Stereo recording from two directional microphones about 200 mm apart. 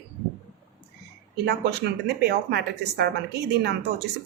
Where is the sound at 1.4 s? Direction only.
55° right (ahead or behind).